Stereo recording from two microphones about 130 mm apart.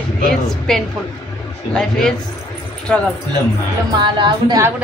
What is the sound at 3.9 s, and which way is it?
Speech, 40° right (ahead or behind).